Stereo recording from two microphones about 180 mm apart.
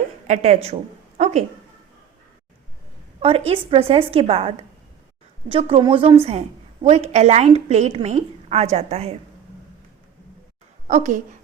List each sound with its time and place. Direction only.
0.3 s a woman's voice: 40° right (ahead or behind)
3.2 s a woman's voice: 35° right (ahead or behind)
10.8 s a woman's voice: 40° right (ahead or behind)